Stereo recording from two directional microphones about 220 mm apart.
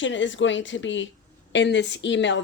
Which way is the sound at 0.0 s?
55° left (ahead or behind).